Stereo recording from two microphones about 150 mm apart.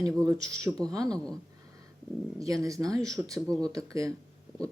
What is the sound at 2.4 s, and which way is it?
Speech, 20° right (ahead or behind).